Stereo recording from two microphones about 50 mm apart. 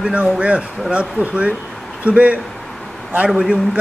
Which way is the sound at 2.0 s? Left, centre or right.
Right.